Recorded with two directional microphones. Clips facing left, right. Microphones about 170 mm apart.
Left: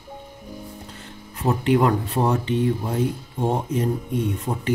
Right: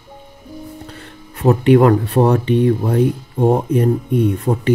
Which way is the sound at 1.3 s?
65° right (ahead or behind).